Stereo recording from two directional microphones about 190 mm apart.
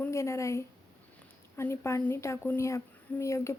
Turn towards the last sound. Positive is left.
turn(degrees=15)  # may be behind; listen again after turning